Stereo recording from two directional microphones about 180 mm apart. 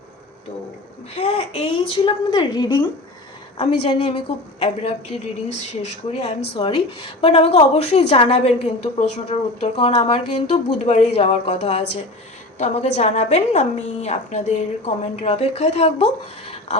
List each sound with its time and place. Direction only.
1.1 s a woman's voice: 35° left (ahead or behind)